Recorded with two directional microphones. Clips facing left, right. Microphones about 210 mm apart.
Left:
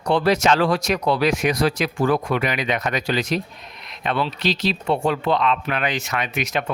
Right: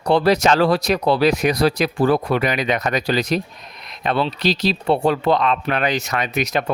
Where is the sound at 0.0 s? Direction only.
35° right (ahead or behind).